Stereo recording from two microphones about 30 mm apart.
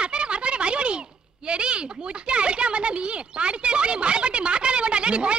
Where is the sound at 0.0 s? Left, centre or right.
Right.